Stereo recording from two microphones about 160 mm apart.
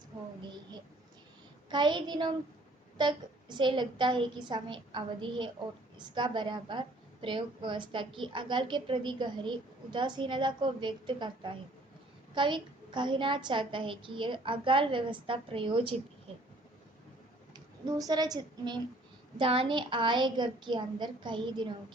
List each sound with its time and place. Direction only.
1.7 s a woman's voice: 30° right (ahead or behind)
17.5 s a woman's voice: 25° right (ahead or behind)